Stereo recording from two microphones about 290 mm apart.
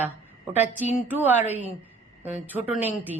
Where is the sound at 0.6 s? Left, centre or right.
Left.